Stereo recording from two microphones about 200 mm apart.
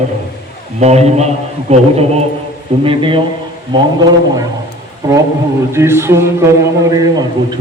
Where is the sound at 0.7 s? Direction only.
35° right (ahead or behind).